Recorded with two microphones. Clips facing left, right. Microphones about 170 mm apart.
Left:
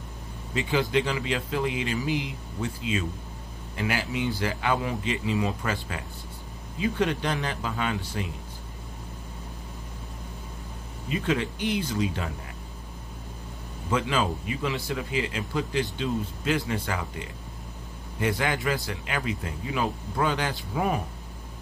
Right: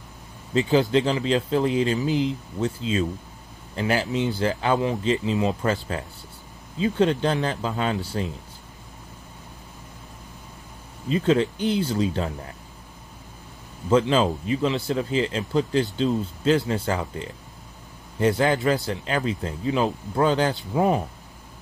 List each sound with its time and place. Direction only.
0.6 s speech: 30° right (ahead or behind)
11.1 s speech: 30° right (ahead or behind)
13.8 s a man's voice: 30° right (ahead or behind)